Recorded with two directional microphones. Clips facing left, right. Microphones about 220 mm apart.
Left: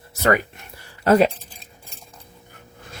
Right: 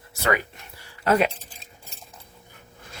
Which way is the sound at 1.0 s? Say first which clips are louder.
Left 5 dB; 40° left (ahead or behind).